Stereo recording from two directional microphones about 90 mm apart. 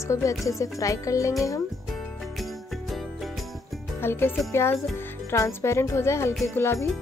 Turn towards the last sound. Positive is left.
turn(degrees=30)  # may be behind; listen again after turning